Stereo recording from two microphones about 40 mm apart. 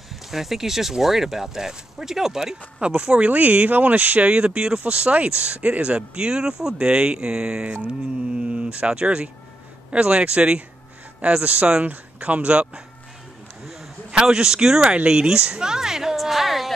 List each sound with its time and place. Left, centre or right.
0.1 s speech: centre
3.2 s speech: right
7.6 s speech: right
14.2 s speech: centre
16.2 s a sound: centre